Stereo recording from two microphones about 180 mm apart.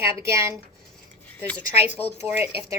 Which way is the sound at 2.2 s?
10° right (ahead or behind).